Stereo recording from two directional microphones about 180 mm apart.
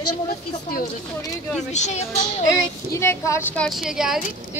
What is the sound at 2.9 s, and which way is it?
Speech, 15° left (ahead or behind).